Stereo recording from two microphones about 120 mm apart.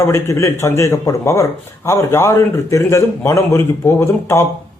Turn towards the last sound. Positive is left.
turn(degrees=20)  # may be behind; listen again after turning